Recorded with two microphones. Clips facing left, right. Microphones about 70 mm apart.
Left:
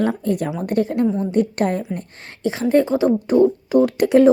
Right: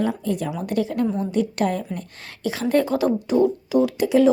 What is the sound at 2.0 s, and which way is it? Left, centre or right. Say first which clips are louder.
A woman's voice: left 2 dB; left.